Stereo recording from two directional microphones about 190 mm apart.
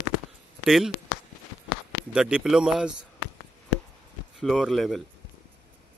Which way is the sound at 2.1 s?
5° right (ahead or behind).